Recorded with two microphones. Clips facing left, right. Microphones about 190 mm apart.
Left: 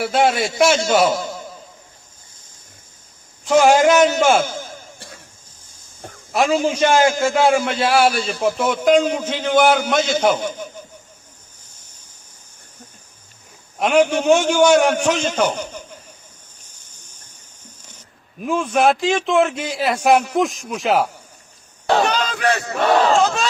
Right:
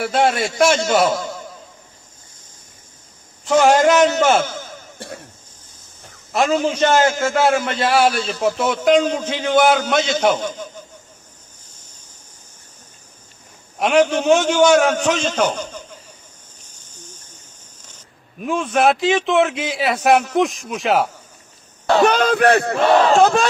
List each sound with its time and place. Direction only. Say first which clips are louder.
0.0 s a man's voice: even; 10° left (ahead or behind)
3.4 s a man's voice: left 1 dB; 10° left (ahead or behind)
4.9 s throat clearing: right 8 dB; 60° right (ahead or behind)
6.3 s a man's voice: even; 10° left (ahead or behind)
13.9 s a man's voice: even; 10° left (ahead or behind)
18.3 s a man's voice: even; centre (ahead or behind)
22.0 s speech: right 6 dB; 55° right (ahead or behind)